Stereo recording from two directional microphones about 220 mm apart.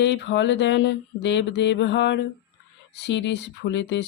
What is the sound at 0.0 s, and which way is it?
Speech, 55° left (ahead or behind).